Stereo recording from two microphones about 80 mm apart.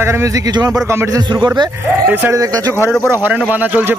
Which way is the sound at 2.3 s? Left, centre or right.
Right.